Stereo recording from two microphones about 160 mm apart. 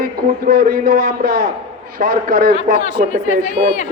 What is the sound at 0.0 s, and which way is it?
A man's voice, 65° right (ahead or behind).